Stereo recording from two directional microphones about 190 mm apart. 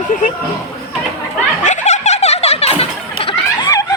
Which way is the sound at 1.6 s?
40° left (ahead or behind).